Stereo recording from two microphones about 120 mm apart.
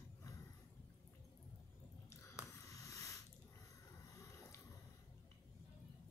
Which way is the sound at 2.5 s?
25° left (ahead or behind).